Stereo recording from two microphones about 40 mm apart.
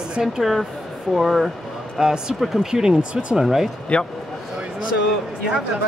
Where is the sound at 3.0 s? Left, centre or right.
Right.